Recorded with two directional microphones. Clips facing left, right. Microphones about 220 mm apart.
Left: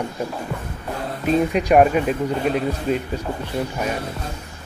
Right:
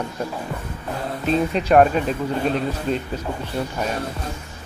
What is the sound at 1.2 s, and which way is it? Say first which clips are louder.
Speech: left 2 dB; 10° left (ahead or behind).